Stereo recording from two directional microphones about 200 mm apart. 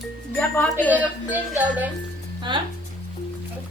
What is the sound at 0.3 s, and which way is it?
Speech, 10° left (ahead or behind).